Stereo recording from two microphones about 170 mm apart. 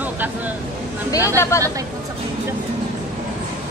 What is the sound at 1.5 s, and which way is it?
Speech, 15° left (ahead or behind).